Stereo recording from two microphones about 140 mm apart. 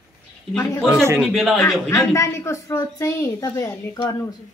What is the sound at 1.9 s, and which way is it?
A woman's voice, 20° left (ahead or behind).